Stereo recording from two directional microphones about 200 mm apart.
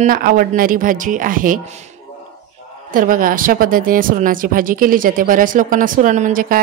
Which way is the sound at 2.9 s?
45° right (ahead or behind).